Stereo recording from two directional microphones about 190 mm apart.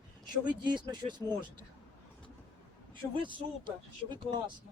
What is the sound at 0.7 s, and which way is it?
Speech, 25° right (ahead or behind).